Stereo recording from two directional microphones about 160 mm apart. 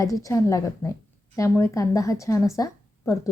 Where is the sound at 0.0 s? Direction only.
20° left (ahead or behind).